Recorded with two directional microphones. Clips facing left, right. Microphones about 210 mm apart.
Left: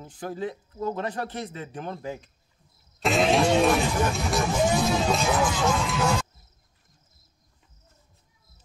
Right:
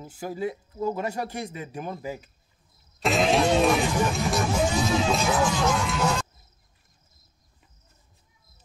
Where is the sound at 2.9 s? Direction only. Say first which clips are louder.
Even; centre (ahead or behind).